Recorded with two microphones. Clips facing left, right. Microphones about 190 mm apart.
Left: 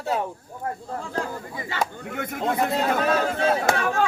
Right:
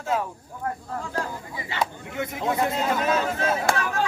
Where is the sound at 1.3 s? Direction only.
45° left (ahead or behind).